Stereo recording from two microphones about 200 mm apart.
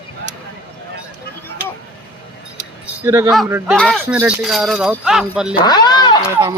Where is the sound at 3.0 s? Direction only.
15° right (ahead or behind).